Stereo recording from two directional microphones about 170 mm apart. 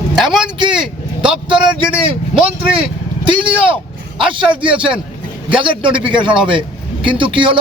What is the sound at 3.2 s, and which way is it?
A man's voice, 30° right (ahead or behind).